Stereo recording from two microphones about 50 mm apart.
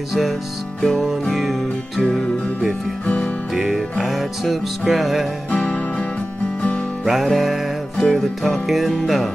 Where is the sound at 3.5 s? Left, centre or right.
Centre.